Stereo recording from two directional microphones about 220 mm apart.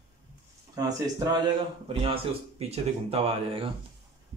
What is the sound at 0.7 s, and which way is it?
Speech, 15° right (ahead or behind).